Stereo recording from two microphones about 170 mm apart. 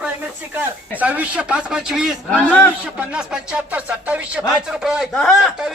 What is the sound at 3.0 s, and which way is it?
A man's voice, 5° right (ahead or behind).